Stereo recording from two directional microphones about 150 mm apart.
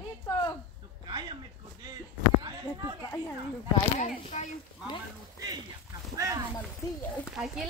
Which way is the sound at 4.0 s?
50° left (ahead or behind).